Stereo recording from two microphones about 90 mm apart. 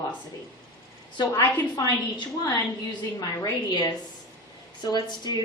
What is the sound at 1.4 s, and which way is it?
Speech, 45° left (ahead or behind).